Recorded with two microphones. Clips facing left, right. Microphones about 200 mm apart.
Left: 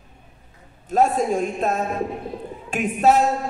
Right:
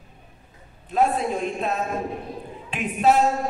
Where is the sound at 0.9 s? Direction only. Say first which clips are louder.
Left 3 dB; 45° left (ahead or behind).